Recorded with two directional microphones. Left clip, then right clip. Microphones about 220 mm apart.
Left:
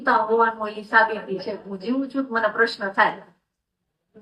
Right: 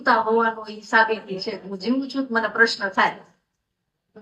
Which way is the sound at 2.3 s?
50° right (ahead or behind).